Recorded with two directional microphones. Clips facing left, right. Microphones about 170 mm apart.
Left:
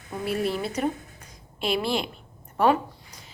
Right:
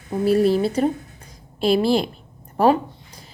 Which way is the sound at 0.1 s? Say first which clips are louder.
Right 10 dB; 35° right (ahead or behind).